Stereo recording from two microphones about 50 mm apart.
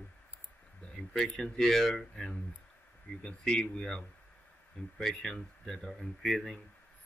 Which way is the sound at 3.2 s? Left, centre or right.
Centre.